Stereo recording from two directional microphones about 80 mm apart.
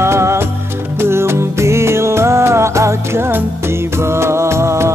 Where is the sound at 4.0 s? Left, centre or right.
Right.